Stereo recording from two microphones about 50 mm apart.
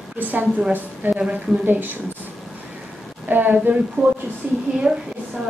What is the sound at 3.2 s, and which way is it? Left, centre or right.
Speech, right.